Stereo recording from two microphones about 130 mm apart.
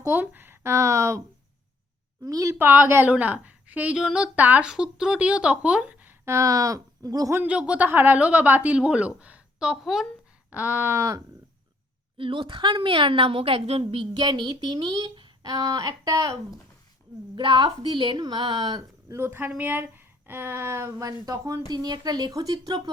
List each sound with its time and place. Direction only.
0.0 s speech: 15° right (ahead or behind)
2.2 s a woman's voice: 25° right (ahead or behind)
7.3 s a woman's voice: 10° right (ahead or behind)
12.1 s a woman's voice: 40° right (ahead or behind)
17.3 s a woman's voice: 35° right (ahead or behind)
19.1 s a woman's voice: 20° right (ahead or behind)